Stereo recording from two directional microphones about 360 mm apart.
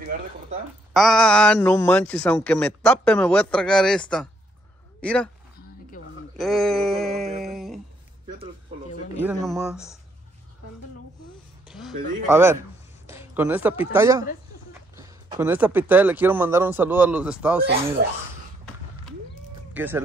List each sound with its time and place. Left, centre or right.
0.1 s a sound: right
0.9 s speech: centre
6.3 s a sound: centre
9.2 s speech: centre
11.6 s speech: centre
19.7 s speech: centre